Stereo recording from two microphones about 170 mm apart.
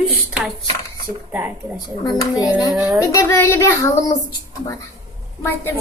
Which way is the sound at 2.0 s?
25° left (ahead or behind).